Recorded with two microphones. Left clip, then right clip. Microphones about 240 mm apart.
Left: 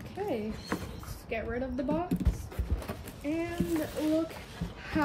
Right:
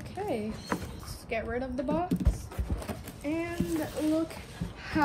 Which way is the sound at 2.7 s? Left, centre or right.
Centre.